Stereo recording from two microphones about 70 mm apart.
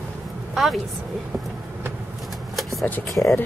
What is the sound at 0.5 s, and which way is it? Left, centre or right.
Speech, centre.